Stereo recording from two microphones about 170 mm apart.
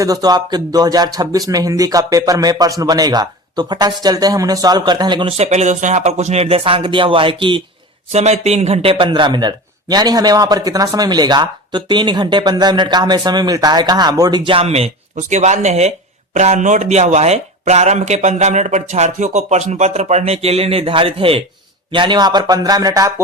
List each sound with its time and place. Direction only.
0.0 s speech: 20° right (ahead or behind)
5.4 s speech: 40° right (ahead or behind)
8.1 s speech: 40° right (ahead or behind); by 23.2 s 20° right (ahead or behind)